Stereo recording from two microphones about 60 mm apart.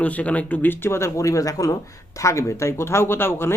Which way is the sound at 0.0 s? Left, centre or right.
Left.